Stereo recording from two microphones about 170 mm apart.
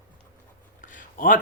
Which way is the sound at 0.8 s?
50° left (ahead or behind).